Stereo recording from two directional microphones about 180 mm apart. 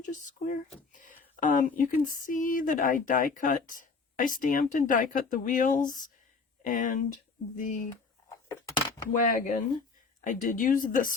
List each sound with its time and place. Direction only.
0.0 s speech: 45° left (ahead or behind)
8.4 s a sound: 20° left (ahead or behind)
9.1 s speech: 45° left (ahead or behind)